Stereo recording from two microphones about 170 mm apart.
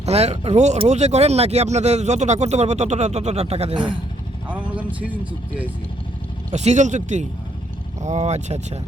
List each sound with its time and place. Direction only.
0.0 s speech: 40° right (ahead or behind)
4.4 s speech: 10° right (ahead or behind)
6.5 s speech: 40° right (ahead or behind)